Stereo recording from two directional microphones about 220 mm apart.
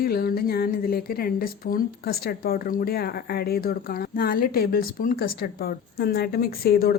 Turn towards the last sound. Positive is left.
turn(degrees=45)  # may be behind; listen again after turning